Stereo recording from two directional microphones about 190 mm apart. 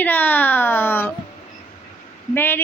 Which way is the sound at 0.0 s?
10° left (ahead or behind).